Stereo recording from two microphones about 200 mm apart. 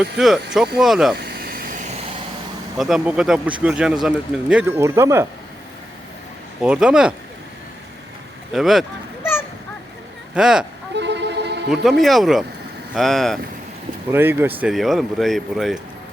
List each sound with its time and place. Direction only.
0.0 s speech: centre (ahead or behind)
1.1 s vehicle: 50° right (ahead or behind)
2.7 s speech: centre (ahead or behind)
6.6 s speech: 5° right (ahead or behind)
8.5 s speech: centre (ahead or behind)
10.3 s speech: 5° right (ahead or behind)
10.9 s vehicle: 60° right (ahead or behind)
11.7 s speech: centre (ahead or behind)
14.1 s speech: 10° right (ahead or behind)